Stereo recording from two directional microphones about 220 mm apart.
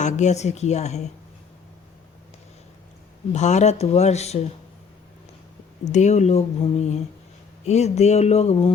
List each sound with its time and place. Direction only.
0.0 s speech: 30° left (ahead or behind)
3.3 s speech: 30° left (ahead or behind)
5.8 s speech: 30° left (ahead or behind)